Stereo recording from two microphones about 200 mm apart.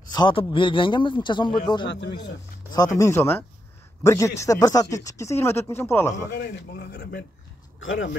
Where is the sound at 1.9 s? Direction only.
60° left (ahead or behind).